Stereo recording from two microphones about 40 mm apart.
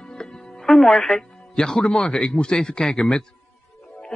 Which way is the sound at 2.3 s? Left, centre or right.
Left.